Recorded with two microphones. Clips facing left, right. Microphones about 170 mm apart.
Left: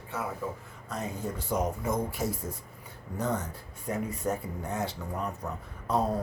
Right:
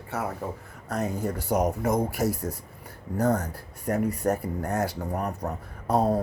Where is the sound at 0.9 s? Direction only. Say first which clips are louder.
Right 6 dB; 70° right (ahead or behind).